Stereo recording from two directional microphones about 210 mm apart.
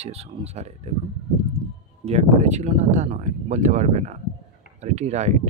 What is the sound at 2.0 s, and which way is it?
Speech, 30° right (ahead or behind).